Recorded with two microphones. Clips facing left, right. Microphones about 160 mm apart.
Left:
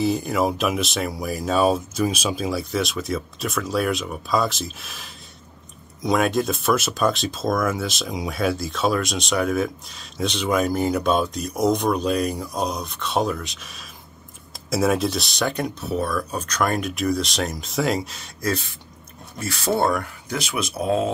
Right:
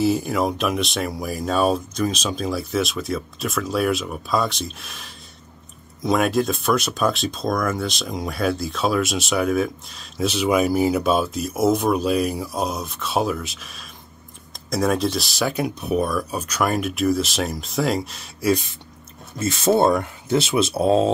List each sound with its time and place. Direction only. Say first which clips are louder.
0.0 s speech: right 1 dB; centre (ahead or behind)
18.4 s speech: right 5 dB; 15° right (ahead or behind)